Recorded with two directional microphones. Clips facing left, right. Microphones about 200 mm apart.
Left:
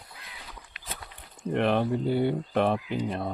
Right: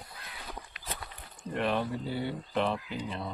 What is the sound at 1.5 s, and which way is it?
Speech, 55° left (ahead or behind).